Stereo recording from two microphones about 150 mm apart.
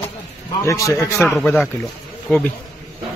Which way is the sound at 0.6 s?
20° left (ahead or behind).